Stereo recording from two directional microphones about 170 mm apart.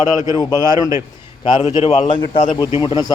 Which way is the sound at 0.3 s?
25° left (ahead or behind).